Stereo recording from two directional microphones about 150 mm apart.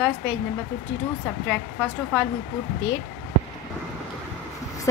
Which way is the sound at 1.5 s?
10° left (ahead or behind).